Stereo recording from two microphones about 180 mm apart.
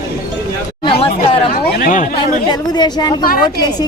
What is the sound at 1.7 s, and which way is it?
Chatter, 50° left (ahead or behind).